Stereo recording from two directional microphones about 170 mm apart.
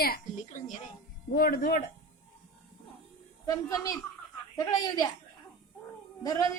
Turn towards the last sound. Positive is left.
turn(degrees=20)  # may be behind; listen again after turning